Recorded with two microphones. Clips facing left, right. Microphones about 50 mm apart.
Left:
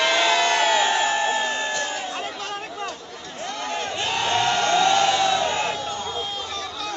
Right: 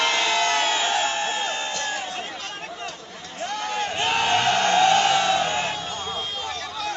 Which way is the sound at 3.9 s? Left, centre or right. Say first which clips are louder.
Right 4 dB; right.